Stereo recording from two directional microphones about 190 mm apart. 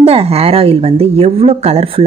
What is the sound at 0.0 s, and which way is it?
Speech, 30° right (ahead or behind).